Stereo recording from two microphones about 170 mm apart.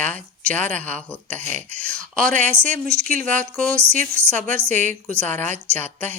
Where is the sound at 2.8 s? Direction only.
70° right (ahead or behind).